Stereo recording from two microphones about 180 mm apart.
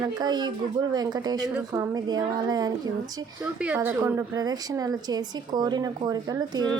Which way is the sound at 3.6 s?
10° right (ahead or behind).